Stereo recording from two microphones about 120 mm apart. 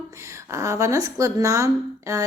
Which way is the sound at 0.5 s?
25° right (ahead or behind).